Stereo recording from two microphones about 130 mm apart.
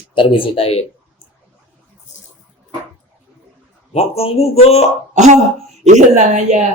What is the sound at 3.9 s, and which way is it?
Speech, 50° left (ahead or behind).